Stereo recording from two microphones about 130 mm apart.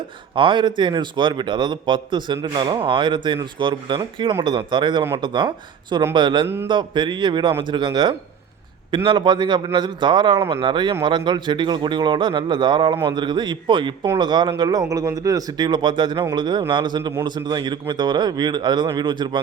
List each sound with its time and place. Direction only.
0.3 s a man's voice: 40° right (ahead or behind)